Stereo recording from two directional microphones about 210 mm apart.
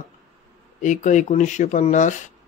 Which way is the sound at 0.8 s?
35° left (ahead or behind).